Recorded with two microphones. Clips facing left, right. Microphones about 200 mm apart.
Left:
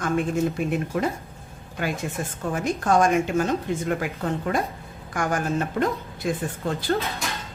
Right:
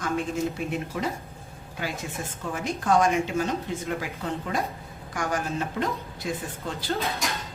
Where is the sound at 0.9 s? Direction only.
50° left (ahead or behind).